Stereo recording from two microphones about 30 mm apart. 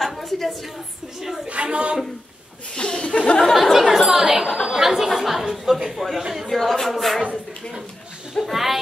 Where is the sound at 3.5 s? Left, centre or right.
Centre.